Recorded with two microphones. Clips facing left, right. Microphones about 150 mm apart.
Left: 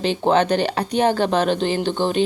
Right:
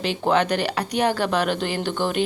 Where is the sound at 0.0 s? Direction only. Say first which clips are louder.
Left 3 dB; 30° left (ahead or behind).